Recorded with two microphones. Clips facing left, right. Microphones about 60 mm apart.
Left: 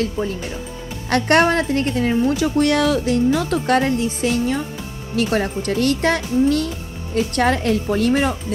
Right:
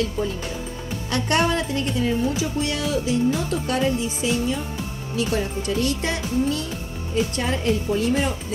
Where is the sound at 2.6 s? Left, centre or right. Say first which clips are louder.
Left 9 dB; left.